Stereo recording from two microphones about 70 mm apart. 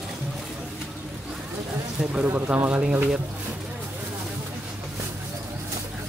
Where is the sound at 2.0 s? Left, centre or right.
Centre.